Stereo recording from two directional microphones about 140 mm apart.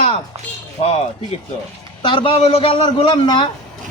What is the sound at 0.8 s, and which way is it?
Speech, 45° left (ahead or behind).